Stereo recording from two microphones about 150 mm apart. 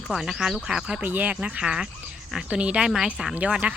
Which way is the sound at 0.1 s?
5° right (ahead or behind).